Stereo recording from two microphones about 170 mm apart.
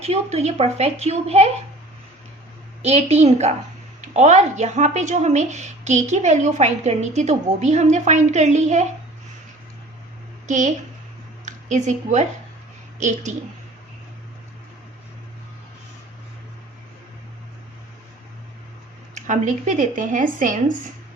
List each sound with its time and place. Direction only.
0.0 s a woman's voice: 40° right (ahead or behind)
2.8 s a woman's voice: 40° right (ahead or behind)
10.4 s a woman's voice: 45° right (ahead or behind)
19.1 s speech: 45° right (ahead or behind)